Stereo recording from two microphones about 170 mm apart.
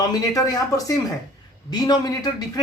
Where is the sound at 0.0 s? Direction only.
20° left (ahead or behind).